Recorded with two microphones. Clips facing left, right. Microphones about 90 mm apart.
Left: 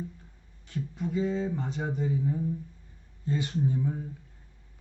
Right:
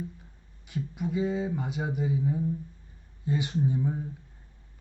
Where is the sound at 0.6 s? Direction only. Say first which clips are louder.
Right 1 dB; 15° right (ahead or behind).